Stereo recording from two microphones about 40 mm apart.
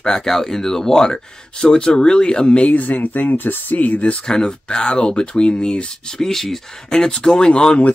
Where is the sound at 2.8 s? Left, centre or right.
Left.